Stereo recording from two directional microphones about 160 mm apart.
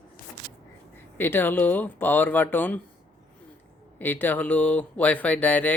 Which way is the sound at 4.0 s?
10° left (ahead or behind).